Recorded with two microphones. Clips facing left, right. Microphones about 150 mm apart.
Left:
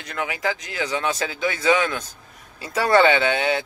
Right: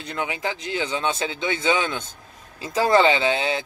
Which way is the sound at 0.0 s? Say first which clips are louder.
Left 1 dB; 25° right (ahead or behind).